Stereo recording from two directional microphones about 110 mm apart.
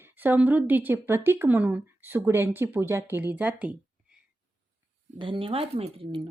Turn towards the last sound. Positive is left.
turn(degrees=-60)  # may be behind; listen again after turning